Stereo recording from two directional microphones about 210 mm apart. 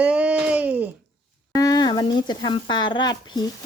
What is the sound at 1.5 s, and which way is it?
Speech, 15° left (ahead or behind).